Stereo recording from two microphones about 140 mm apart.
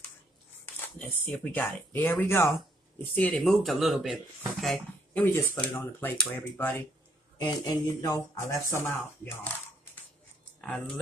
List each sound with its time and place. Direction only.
0.9 s speech: 15° left (ahead or behind)
4.6 s a sound: centre (ahead or behind)
5.2 s speech: 15° left (ahead or behind)
7.3 s speech: 30° left (ahead or behind); by 9.5 s 15° left (ahead or behind)
10.6 s speech: 5° left (ahead or behind)